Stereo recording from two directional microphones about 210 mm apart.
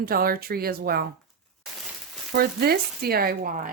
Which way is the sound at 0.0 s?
45° right (ahead or behind).